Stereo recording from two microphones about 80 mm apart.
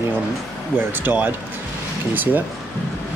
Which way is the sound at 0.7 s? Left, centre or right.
Right.